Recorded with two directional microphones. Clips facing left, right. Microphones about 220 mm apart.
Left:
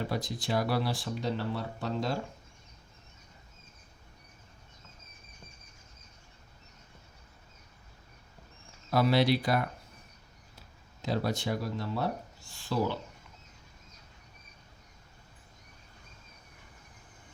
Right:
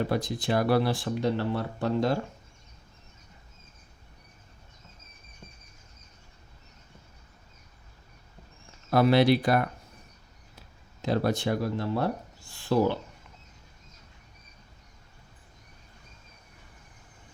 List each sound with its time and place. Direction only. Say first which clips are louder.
0.1 s speech: right 5 dB; 55° right (ahead or behind)
8.9 s speech: right 5 dB; 55° right (ahead or behind)
11.0 s speech: right 5 dB; 55° right (ahead or behind)